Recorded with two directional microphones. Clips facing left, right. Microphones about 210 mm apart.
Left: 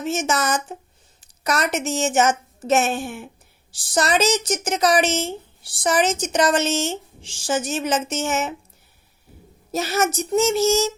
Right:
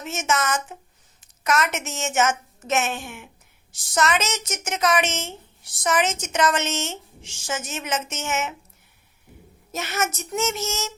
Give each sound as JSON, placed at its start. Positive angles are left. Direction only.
{"t": 0.0, "sound": "a woman's voice", "side_deg": 35}
{"t": 9.7, "sound": "a woman's voice", "side_deg": 35}